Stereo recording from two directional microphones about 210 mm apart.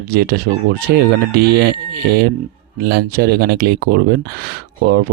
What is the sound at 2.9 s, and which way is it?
Speech, 50° right (ahead or behind).